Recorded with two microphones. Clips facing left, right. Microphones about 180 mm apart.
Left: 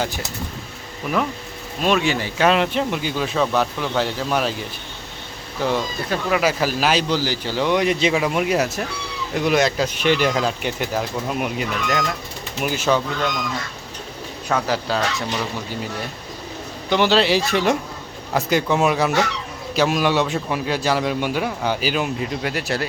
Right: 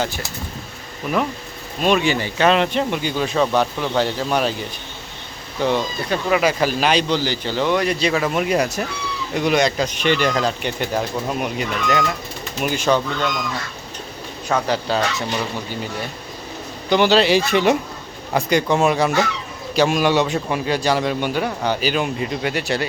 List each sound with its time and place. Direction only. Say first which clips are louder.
0.0 s speech: right 1 dB; 15° left (ahead or behind)
1.8 s speech: right 2 dB; centre (ahead or behind)
5.6 s speech: right 2 dB; 5° left (ahead or behind)
14.7 s speech: right 1 dB; centre (ahead or behind)
16.9 s speech: right 2 dB; centre (ahead or behind)